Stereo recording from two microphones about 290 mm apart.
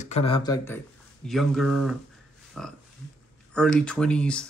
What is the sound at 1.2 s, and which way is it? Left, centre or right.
Speech, centre.